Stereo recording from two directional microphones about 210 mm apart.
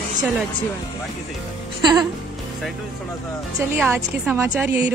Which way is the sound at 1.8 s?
20° right (ahead or behind).